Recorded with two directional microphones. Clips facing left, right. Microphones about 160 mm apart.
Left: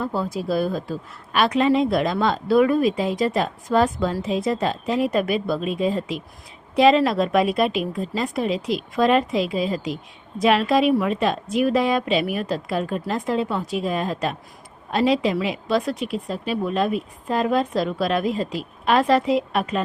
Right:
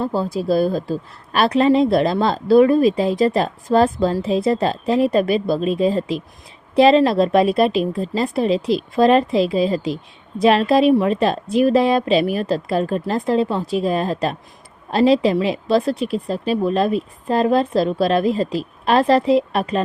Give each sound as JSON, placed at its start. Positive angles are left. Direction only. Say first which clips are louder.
{"t": 0.0, "sound": "a woman's voice", "louder": "right 4 dB", "side_deg": -30}